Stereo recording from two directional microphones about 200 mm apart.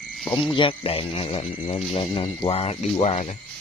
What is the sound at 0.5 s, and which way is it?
Speech, 25° left (ahead or behind).